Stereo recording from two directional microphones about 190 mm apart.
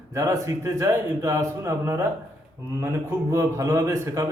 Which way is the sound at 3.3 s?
15° right (ahead or behind).